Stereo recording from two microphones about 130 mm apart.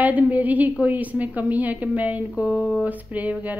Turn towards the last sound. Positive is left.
turn(degrees=-10)  # may be behind; listen again after turning